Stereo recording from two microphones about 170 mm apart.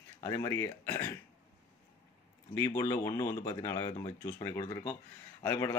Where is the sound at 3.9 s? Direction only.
30° left (ahead or behind).